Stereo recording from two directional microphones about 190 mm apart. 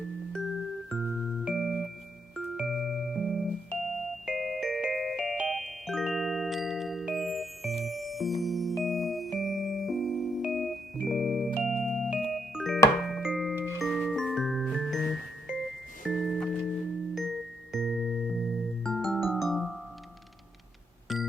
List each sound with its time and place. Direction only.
0.3 s music: centre (ahead or behind)
21.1 s music: centre (ahead or behind)